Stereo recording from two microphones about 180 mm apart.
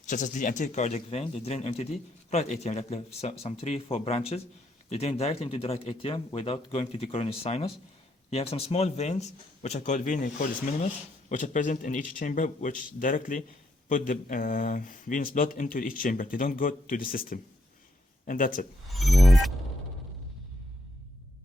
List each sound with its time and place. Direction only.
0.0 s speech: 45° left (ahead or behind)
11.3 s speech: 45° left (ahead or behind)
18.9 s a sound: centre (ahead or behind)